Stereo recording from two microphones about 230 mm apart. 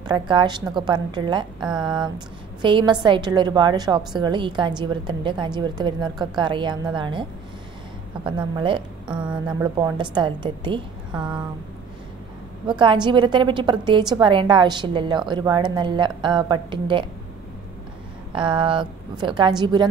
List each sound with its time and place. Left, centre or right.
0.0 s a woman's voice: centre
8.4 s a woman's voice: right
12.6 s a woman's voice: centre
18.3 s a woman's voice: right